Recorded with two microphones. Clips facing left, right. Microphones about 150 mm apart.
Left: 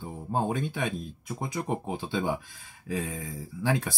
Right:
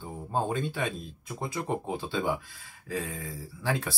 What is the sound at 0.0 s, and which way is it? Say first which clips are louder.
Speech: left 1 dB; 10° left (ahead or behind).